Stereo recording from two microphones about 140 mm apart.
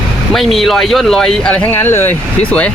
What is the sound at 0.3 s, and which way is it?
Speech, centre (ahead or behind).